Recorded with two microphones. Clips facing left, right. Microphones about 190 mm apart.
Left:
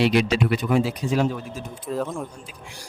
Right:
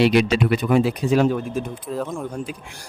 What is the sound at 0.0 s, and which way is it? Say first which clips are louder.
Speech: right 3 dB; 60° right (ahead or behind).